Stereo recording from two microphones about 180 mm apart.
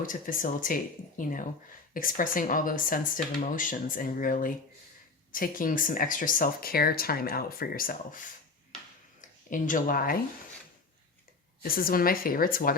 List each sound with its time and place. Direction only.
0.0 s speech: 50° left (ahead or behind)
9.5 s speech: 50° left (ahead or behind)
11.6 s speech: 55° left (ahead or behind)